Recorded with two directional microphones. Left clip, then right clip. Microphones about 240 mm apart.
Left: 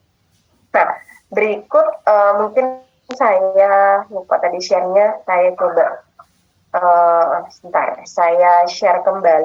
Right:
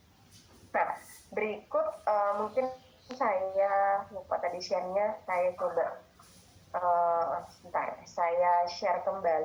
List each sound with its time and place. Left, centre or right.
0.7 s speech: left